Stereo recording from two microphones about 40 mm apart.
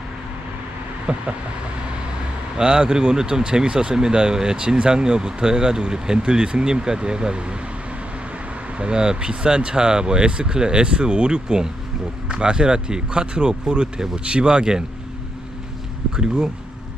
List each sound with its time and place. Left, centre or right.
1.1 s speech: right
2.6 s speech: right
8.8 s speech: right
16.1 s speech: centre